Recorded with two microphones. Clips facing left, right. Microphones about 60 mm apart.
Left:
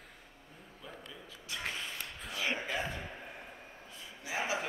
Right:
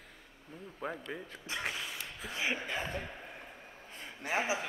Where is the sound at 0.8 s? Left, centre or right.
Right.